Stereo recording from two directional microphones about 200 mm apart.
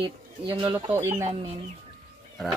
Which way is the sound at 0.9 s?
10° right (ahead or behind).